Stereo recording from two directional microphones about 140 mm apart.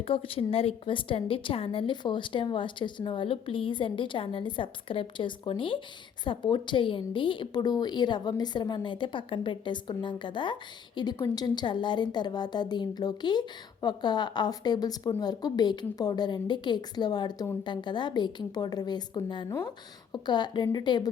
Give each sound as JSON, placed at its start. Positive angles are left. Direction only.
{"t": 0.0, "sound": "a woman's voice", "side_deg": 40}